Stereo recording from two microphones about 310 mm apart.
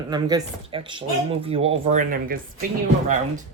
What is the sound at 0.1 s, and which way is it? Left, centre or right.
Speech, centre.